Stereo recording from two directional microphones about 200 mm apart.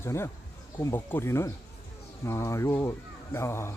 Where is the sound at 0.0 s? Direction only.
15° left (ahead or behind).